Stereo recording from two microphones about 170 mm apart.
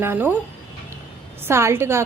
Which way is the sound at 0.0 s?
10° right (ahead or behind).